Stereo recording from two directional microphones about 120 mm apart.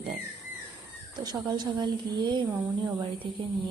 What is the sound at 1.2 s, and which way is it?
A woman's voice, 35° right (ahead or behind).